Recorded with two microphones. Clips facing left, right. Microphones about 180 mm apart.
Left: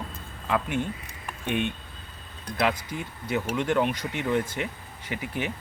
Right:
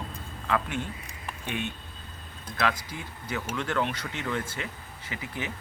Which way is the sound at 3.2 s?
20° left (ahead or behind).